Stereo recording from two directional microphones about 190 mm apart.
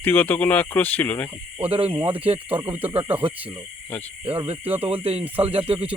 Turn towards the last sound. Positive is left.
turn(degrees=-30)  # may be behind; listen again after turning